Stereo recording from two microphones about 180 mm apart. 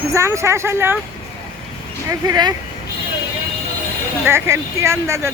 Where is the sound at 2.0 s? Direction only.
20° right (ahead or behind).